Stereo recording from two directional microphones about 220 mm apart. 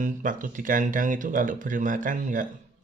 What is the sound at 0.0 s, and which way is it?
Speech, 35° right (ahead or behind).